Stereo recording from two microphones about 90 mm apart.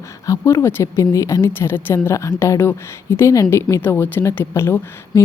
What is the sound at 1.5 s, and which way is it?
Speech, 25° left (ahead or behind).